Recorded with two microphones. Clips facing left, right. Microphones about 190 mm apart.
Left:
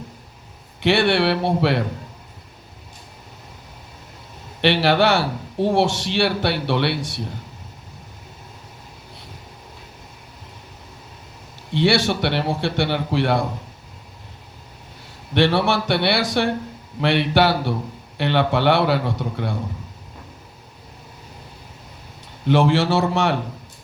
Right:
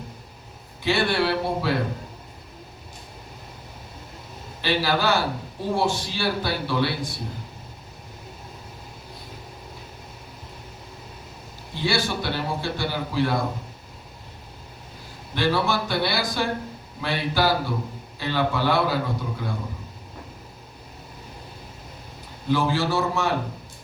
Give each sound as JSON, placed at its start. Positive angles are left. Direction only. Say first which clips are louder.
{"t": 0.8, "sound": "a man's voice", "louder": "left 5 dB", "side_deg": 75}
{"t": 4.6, "sound": "a man's voice", "louder": "left 6 dB", "side_deg": 70}
{"t": 11.7, "sound": "a man's voice", "louder": "left 7 dB", "side_deg": 75}
{"t": 15.4, "sound": "a man's voice", "louder": "left 5 dB", "side_deg": 70}
{"t": 22.4, "sound": "a man's voice", "louder": "left 6 dB", "side_deg": 75}